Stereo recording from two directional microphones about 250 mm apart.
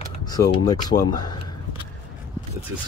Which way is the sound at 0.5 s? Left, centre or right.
Centre.